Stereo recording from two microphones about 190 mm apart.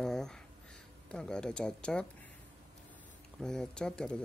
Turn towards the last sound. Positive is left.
turn(degrees=5)  # may be behind; listen again after turning